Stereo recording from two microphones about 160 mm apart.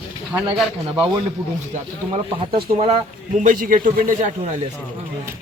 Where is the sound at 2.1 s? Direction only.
35° right (ahead or behind).